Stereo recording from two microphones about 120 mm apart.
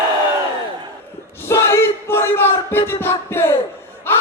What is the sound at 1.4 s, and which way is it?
Battle cry, 20° left (ahead or behind).